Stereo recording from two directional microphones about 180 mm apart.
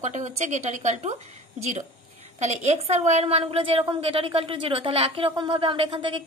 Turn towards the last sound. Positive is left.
turn(degrees=-25)  # may be behind; listen again after turning